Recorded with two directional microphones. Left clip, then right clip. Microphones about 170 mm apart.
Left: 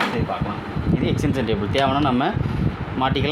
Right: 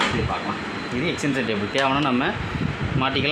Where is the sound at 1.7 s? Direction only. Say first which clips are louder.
Left 1 dB; 90° left.